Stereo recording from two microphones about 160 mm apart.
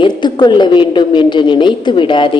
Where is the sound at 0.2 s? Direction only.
25° left (ahead or behind).